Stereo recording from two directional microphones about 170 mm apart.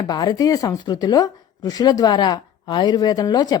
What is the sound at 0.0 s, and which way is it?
Speech, 25° left (ahead or behind).